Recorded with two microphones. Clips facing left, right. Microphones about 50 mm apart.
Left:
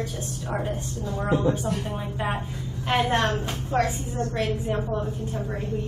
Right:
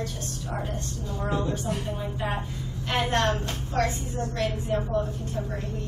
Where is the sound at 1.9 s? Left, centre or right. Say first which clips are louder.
Left 2 dB; centre.